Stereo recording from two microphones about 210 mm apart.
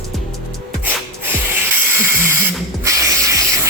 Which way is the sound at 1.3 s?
10° right (ahead or behind).